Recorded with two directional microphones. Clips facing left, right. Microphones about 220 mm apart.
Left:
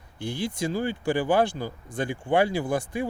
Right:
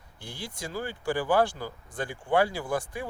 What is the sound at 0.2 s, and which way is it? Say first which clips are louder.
Speech: left 10 dB; 20° left (ahead or behind).